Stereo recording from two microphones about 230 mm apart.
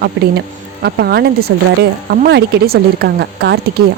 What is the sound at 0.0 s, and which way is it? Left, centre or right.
A woman's voice, right.